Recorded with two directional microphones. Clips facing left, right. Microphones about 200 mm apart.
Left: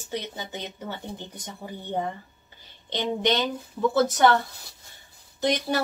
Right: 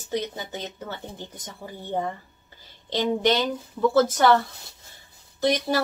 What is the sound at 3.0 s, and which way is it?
Speech, 20° left (ahead or behind).